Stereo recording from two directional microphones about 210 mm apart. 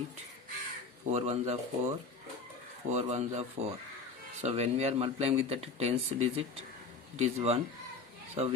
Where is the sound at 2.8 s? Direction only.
30° right (ahead or behind).